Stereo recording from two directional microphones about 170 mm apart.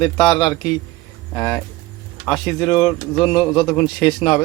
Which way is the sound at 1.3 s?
10° left (ahead or behind).